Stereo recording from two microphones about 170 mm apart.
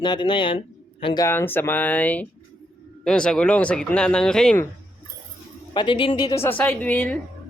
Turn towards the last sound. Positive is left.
turn(degrees=10)  # may be behind; listen again after turning